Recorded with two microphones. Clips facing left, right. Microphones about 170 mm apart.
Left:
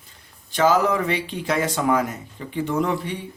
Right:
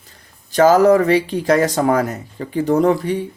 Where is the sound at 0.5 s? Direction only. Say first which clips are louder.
Right 8 dB; 40° right (ahead or behind).